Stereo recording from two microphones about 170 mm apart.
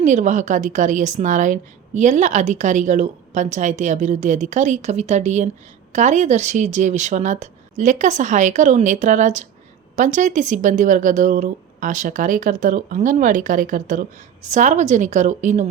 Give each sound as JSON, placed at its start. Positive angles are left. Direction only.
{"t": 0.0, "sound": "a woman's voice", "side_deg": -45}